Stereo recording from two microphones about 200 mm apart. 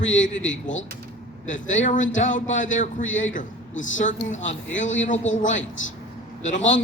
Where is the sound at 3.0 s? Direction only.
75° left (ahead or behind).